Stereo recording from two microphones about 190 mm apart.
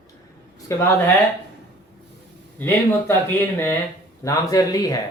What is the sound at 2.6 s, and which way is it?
Speech, 10° left (ahead or behind).